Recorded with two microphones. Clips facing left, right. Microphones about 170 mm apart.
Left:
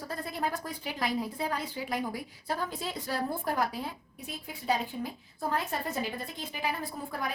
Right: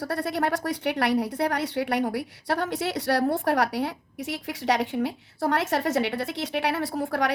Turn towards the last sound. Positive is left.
turn(degrees=-75)  # may be behind; listen again after turning